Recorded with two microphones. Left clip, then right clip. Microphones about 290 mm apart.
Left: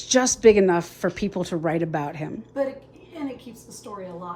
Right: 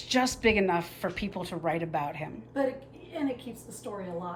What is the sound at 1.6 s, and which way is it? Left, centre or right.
Speech, left.